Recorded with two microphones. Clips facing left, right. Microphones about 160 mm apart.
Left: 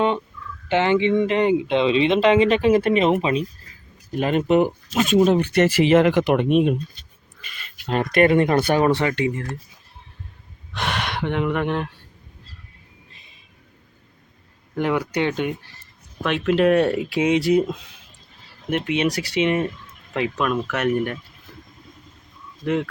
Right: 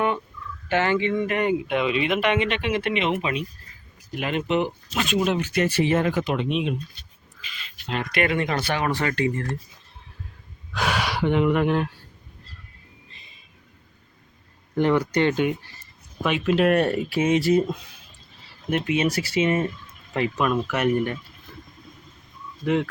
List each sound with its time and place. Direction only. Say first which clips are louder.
0.7 s speech: left 4 dB; 20° left (ahead or behind); by 5.4 s 40° left (ahead or behind)
5.4 s speech: left 5 dB; 80° left; by 6.7 s 50° left (ahead or behind)
7.9 s speech: left 7 dB; 45° left (ahead or behind)
9.0 s speech: left 2 dB; 20° left (ahead or behind)
10.8 s speech: right 1 dB; centre (ahead or behind)
14.8 s speech: right 2 dB; 5° left (ahead or behind)
19.1 s speech: left 1 dB; 5° right (ahead or behind)
22.6 s speech: even; centre (ahead or behind)